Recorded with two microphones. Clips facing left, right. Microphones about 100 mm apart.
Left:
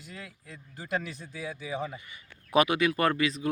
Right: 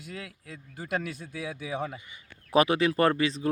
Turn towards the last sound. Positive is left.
turn(degrees=-30)  # may be behind; listen again after turning